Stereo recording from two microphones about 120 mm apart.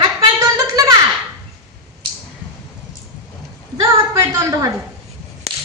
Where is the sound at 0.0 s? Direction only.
30° right (ahead or behind).